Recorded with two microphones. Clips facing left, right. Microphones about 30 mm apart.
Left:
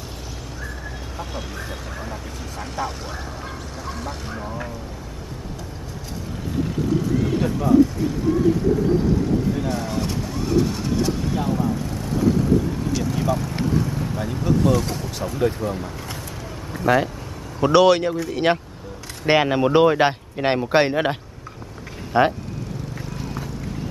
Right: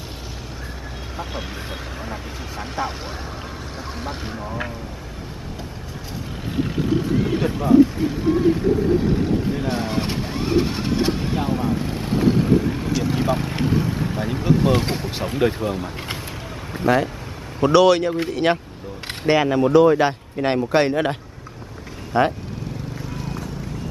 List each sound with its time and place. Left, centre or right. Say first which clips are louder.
1.1 s speech: right 2 dB; centre
6.5 s vehicle: right 1 dB; right
13.0 s speech: right 3 dB; right
16.8 s speech: even; centre
19.2 s speech: even; left